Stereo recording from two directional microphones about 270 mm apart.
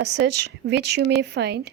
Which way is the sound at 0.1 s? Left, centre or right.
Right.